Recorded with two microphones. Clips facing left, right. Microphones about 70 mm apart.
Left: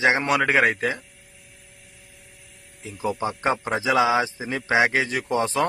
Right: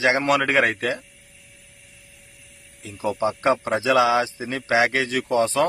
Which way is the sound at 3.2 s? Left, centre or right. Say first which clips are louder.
Right 6 dB; centre.